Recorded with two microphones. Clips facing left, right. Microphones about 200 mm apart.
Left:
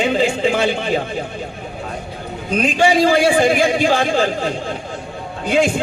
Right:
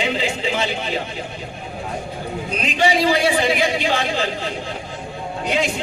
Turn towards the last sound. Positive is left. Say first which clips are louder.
# left 5 dB
turn(degrees=50)  # may be behind; listen again after turning